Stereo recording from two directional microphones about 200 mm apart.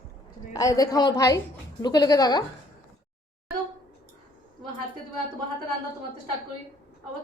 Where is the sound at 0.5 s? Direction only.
15° left (ahead or behind).